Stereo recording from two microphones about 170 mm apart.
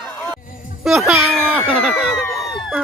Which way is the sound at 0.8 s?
Centre (ahead or behind).